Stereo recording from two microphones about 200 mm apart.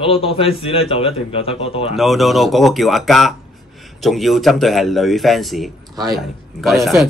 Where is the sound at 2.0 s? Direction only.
Centre (ahead or behind).